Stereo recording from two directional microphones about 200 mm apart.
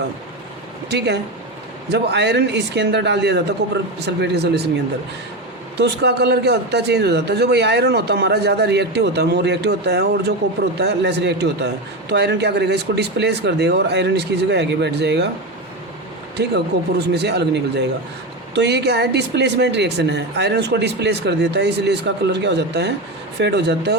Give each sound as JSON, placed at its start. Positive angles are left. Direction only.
{"t": 0.9, "sound": "a man's voice", "side_deg": -55}
{"t": 5.7, "sound": "a man's voice", "side_deg": -55}
{"t": 16.4, "sound": "a man's voice", "side_deg": -55}